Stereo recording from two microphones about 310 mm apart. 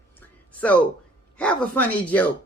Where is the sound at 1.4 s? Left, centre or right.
Centre.